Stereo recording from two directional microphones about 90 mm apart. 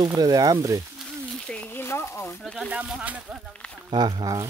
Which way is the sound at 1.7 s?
25° left (ahead or behind).